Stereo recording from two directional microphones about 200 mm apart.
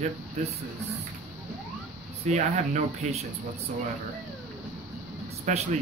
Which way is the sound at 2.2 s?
35° right (ahead or behind).